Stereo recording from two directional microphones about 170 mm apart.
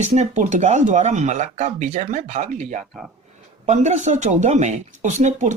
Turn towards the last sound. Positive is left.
turn(degrees=-45)  # may be behind; listen again after turning